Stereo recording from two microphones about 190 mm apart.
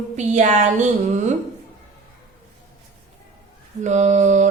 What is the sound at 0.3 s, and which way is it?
Speech, 40° right (ahead or behind).